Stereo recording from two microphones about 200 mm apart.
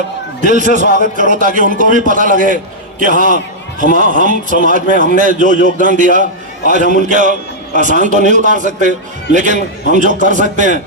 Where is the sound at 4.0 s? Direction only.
40° right (ahead or behind).